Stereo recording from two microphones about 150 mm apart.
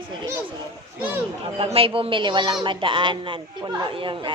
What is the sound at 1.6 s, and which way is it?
A woman's voice, 40° right (ahead or behind).